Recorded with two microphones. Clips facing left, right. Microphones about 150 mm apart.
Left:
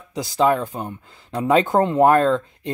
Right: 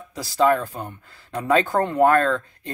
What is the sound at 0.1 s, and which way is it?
Speech, 20° left (ahead or behind).